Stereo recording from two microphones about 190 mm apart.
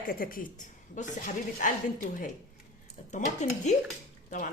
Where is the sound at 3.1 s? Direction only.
40° left (ahead or behind).